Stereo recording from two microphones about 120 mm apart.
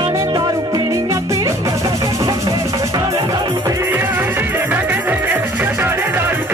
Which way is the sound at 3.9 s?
15° right (ahead or behind).